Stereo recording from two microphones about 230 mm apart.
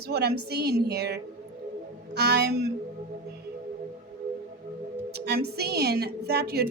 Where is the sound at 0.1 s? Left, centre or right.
Right.